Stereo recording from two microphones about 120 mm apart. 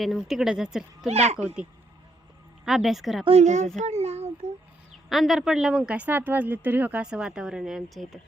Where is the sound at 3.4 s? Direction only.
80° right.